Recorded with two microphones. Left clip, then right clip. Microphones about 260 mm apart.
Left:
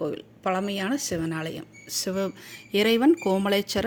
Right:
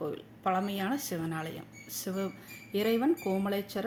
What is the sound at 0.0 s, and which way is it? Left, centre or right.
Speech, left.